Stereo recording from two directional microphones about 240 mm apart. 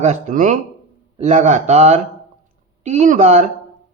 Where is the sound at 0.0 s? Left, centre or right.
Right.